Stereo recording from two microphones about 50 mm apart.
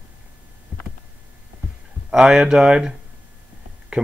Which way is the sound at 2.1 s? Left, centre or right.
Centre.